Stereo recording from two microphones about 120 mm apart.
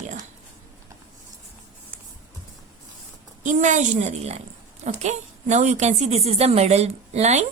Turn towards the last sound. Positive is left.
turn(degrees=-65)  # may be behind; listen again after turning